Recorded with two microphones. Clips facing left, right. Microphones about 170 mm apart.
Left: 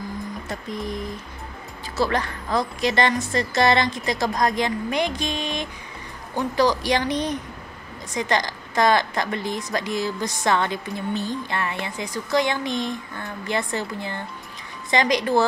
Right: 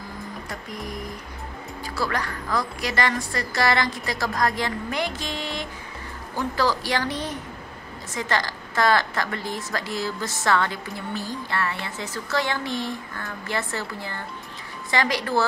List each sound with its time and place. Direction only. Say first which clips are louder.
0.5 s music: left 6 dB; 25° left (ahead or behind)
2.0 s a woman's voice: left 5 dB; 25° left (ahead or behind)